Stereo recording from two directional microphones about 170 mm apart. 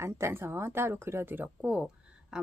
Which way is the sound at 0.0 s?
15° right (ahead or behind).